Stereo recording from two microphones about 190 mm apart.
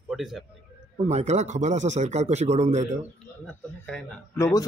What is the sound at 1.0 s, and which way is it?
Speech, 35° right (ahead or behind).